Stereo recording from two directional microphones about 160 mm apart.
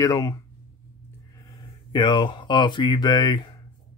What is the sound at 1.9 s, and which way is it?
Speech, 30° left (ahead or behind).